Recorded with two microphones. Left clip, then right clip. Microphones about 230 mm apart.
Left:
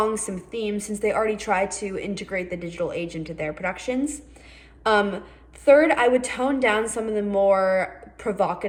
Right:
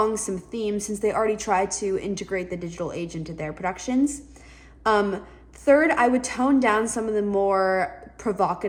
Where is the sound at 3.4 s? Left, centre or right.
Centre.